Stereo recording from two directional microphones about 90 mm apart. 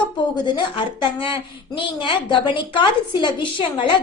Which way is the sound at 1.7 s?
65° left (ahead or behind).